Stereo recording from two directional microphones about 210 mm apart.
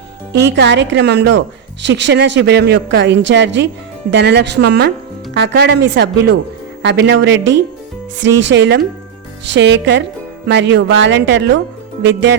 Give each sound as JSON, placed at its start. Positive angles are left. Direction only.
{"t": 0.5, "sound": "a woman's voice", "side_deg": -55}